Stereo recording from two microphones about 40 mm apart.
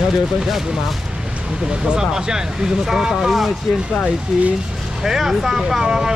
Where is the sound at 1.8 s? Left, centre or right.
Centre.